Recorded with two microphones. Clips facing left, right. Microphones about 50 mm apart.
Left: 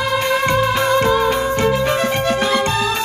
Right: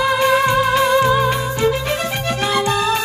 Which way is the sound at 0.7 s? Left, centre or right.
Left.